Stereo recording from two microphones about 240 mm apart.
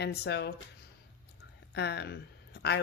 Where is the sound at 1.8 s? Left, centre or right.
Left.